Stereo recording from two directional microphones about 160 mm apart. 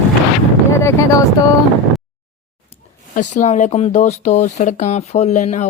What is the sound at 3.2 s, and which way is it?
Speech, 50° left (ahead or behind).